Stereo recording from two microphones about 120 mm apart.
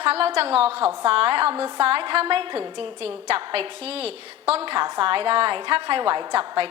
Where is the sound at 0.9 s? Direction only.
50° right (ahead or behind).